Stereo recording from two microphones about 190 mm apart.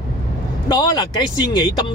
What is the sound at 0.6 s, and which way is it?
Speech, 20° left (ahead or behind).